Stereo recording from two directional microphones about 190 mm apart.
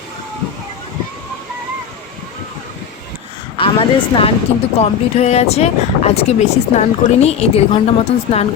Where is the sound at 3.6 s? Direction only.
30° left (ahead or behind).